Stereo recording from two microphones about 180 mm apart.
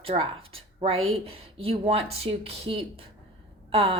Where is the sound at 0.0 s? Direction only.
30° right (ahead or behind).